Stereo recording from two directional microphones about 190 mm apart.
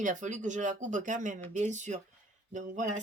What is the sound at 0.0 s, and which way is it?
Speech, 40° right (ahead or behind).